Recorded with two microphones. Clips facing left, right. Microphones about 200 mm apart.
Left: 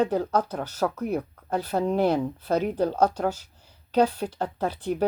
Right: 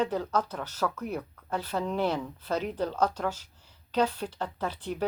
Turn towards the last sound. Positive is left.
turn(degrees=45)  # may be behind; listen again after turning